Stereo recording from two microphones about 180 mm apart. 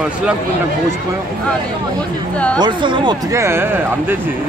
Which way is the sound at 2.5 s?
25° right (ahead or behind).